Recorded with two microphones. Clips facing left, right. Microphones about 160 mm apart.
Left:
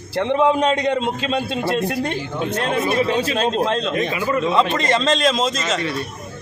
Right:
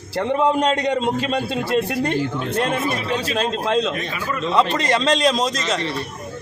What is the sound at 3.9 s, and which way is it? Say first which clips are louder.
Speech: left 6 dB; 20° left (ahead or behind).